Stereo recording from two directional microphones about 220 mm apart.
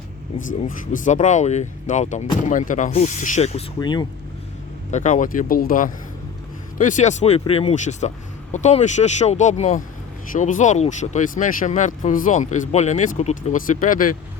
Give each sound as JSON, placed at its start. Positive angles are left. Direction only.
{"t": 0.9, "sound": "speech", "side_deg": 35}
{"t": 4.9, "sound": "speech", "side_deg": 35}